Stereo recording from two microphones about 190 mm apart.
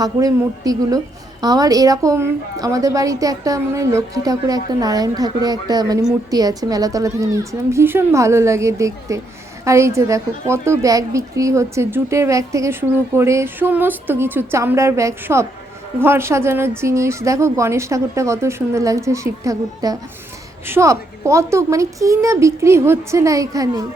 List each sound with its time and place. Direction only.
0.0 s a woman's voice: 20° right (ahead or behind)